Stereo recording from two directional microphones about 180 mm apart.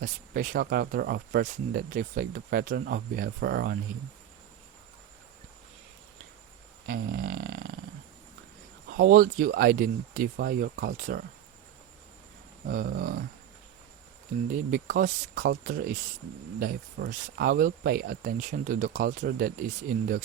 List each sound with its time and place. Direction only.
0.0 s speech: 50° right (ahead or behind)
6.8 s a sound: 55° right (ahead or behind)
8.9 s speech: 50° right (ahead or behind)
12.6 s speech: 55° right (ahead or behind)
14.5 s speech: 50° right (ahead or behind)